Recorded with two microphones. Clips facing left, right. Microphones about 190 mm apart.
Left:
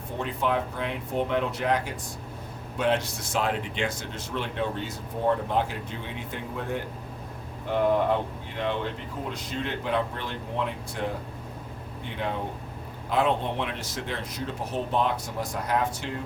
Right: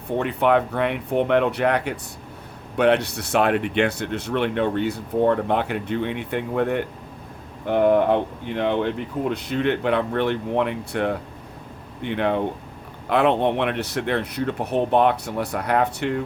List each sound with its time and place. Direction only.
0.2 s speech: 65° right (ahead or behind)